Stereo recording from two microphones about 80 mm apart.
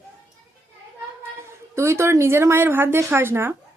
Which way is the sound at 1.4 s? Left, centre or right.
Right.